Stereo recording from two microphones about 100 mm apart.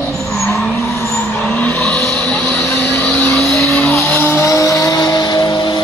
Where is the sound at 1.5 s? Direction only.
20° left (ahead or behind).